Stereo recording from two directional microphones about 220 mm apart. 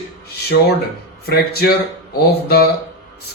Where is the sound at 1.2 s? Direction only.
45° left (ahead or behind).